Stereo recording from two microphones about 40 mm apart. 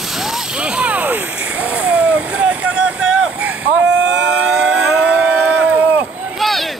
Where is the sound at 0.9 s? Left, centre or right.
Right.